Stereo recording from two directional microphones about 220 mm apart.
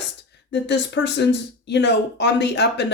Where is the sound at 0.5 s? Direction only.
50° left (ahead or behind).